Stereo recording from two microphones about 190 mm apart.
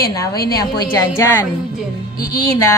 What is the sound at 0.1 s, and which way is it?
Speech, 15° left (ahead or behind).